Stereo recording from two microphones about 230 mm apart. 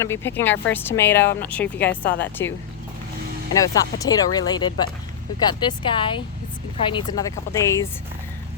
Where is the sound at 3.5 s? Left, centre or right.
Centre.